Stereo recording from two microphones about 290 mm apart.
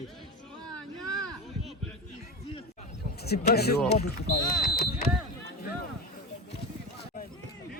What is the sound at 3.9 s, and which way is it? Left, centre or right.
Speech, left.